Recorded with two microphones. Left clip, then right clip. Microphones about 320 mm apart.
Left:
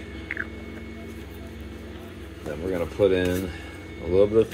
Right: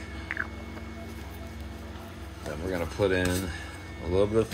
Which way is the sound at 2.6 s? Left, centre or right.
Right.